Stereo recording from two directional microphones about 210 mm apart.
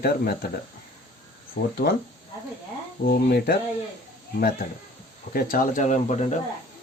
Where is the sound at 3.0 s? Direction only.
45° left (ahead or behind).